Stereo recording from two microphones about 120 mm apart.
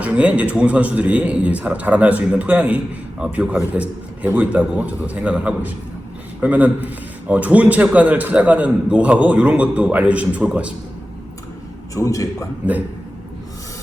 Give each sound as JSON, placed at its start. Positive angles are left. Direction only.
{"t": 0.0, "sound": "a man's voice", "side_deg": -10}
{"t": 11.9, "sound": "a man's voice", "side_deg": 25}